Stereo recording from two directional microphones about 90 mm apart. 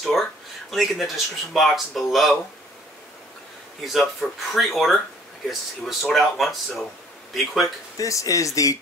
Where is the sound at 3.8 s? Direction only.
Centre (ahead or behind).